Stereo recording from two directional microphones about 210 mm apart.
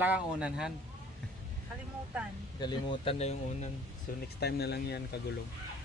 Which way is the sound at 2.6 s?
20° left (ahead or behind).